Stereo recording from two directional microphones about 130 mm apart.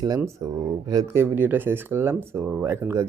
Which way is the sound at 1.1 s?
15° right (ahead or behind).